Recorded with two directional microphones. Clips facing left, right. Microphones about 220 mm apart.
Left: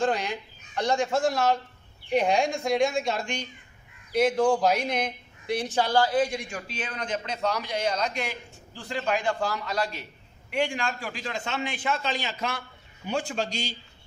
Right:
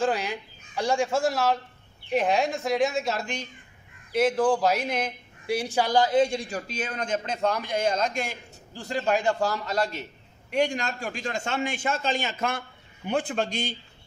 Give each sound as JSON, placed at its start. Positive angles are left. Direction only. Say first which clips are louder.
{"t": 0.0, "sound": "a man's voice", "louder": "even", "side_deg": -5}